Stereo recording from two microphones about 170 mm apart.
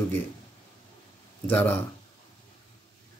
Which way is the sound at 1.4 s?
10° left (ahead or behind).